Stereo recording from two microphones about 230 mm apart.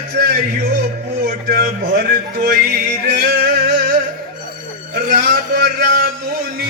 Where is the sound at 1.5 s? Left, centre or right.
Right.